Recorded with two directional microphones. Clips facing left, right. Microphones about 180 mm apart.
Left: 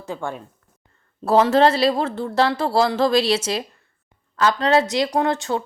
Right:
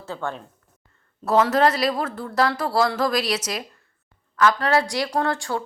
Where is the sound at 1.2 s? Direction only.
30° left (ahead or behind).